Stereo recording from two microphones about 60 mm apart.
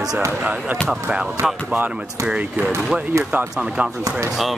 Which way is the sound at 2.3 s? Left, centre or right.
Centre.